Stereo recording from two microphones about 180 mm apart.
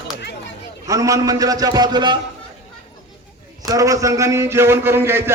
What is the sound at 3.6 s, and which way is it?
Music, 20° right (ahead or behind).